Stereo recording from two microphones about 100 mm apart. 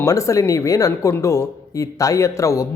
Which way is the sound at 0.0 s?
35° left (ahead or behind).